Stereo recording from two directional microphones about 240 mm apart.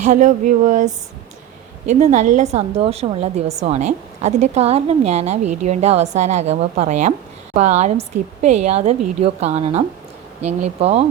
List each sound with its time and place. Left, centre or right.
0.0 s speech: right
2.0 s a woman's voice: right